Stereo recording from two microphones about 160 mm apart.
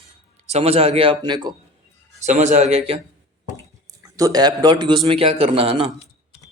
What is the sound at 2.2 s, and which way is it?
Speech, 45° right (ahead or behind).